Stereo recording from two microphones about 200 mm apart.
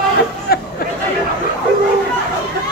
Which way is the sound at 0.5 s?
50° left (ahead or behind).